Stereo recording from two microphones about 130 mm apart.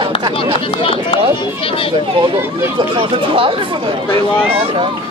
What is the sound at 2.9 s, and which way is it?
Speech, 45° right (ahead or behind).